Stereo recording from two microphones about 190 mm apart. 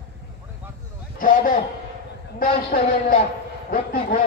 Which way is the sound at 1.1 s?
45° left (ahead or behind).